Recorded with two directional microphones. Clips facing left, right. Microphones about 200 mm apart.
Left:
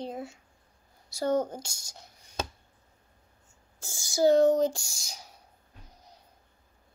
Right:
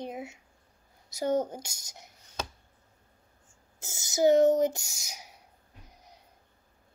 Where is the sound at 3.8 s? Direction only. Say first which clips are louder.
Even; 20° right (ahead or behind).